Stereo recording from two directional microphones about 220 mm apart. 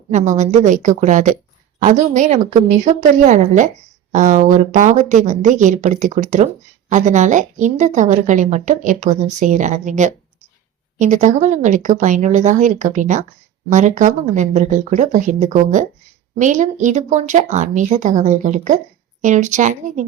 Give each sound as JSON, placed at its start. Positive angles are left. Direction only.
{"t": 0.1, "sound": "speech", "side_deg": -35}